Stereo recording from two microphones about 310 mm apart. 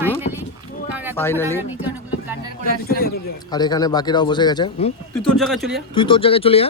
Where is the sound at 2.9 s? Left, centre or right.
Left.